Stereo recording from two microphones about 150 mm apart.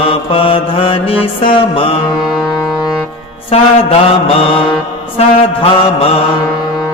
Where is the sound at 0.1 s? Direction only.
35° left (ahead or behind).